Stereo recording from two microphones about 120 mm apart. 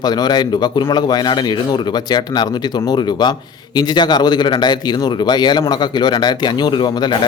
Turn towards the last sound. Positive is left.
turn(degrees=40)  # may be behind; listen again after turning